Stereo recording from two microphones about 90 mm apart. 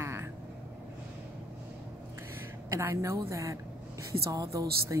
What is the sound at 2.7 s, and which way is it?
Speech, 35° right (ahead or behind).